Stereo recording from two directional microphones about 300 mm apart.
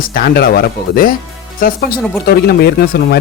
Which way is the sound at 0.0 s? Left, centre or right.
Left.